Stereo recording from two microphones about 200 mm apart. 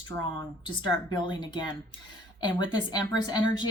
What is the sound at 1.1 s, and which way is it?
A woman's voice, 20° left (ahead or behind).